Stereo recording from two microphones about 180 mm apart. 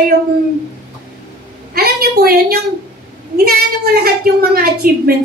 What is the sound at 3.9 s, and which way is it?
A woman's voice, 60° right (ahead or behind).